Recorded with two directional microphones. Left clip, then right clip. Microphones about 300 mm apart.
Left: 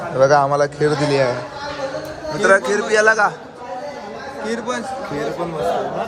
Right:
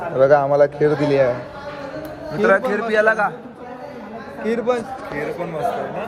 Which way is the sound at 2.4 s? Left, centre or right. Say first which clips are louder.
Left 2 dB; centre.